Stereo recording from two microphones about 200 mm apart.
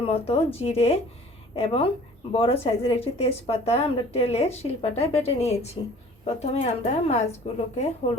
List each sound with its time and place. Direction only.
0.0 s speech: 30° left (ahead or behind)